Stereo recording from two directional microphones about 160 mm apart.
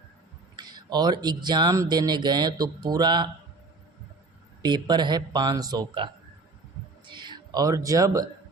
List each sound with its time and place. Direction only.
0.5 s speech: 25° right (ahead or behind)
4.6 s speech: 25° right (ahead or behind)
7.1 s speech: 30° right (ahead or behind)